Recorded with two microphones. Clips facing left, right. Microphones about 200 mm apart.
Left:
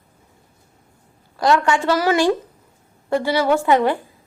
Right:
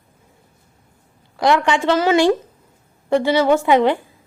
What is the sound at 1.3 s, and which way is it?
A woman's voice, 15° right (ahead or behind).